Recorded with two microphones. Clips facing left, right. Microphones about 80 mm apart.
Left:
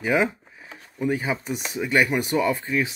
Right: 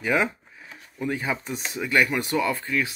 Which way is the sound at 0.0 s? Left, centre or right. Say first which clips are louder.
Left 2 dB; centre.